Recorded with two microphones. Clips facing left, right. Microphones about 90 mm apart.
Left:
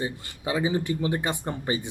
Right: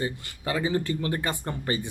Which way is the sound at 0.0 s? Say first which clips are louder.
Even; 15° left (ahead or behind).